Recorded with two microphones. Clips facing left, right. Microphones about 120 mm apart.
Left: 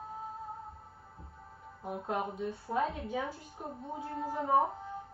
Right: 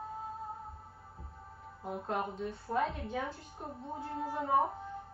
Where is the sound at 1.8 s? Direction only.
10° left (ahead or behind).